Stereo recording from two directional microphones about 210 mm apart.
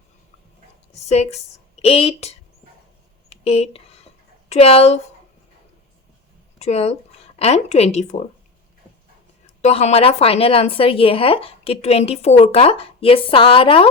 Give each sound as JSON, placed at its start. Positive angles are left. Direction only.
{"t": 1.0, "sound": "a woman's voice", "side_deg": 30}
{"t": 3.2, "sound": "a sound", "side_deg": 30}
{"t": 4.4, "sound": "speech", "side_deg": 30}
{"t": 6.6, "sound": "speech", "side_deg": 30}
{"t": 9.6, "sound": "a woman's voice", "side_deg": 30}